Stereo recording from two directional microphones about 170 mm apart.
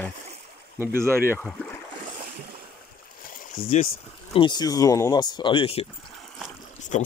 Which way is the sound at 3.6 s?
60° left (ahead or behind).